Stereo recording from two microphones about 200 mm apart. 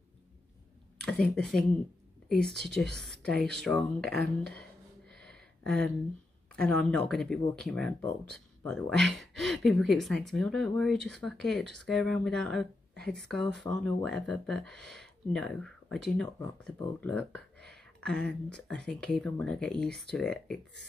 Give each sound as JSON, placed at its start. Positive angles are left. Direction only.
{"t": 1.0, "sound": "speech", "side_deg": 5}
{"t": 3.4, "sound": "a sound", "side_deg": 0}
{"t": 6.5, "sound": "speech", "side_deg": 5}